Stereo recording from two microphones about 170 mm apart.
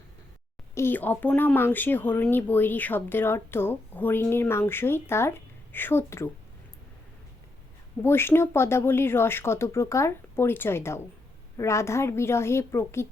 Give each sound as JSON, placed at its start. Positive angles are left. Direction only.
{"t": 0.7, "sound": "speech", "side_deg": 15}
{"t": 8.0, "sound": "speech", "side_deg": 15}